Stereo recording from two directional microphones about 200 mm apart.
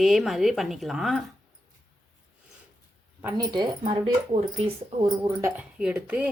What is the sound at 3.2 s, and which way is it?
Speech, 15° right (ahead or behind).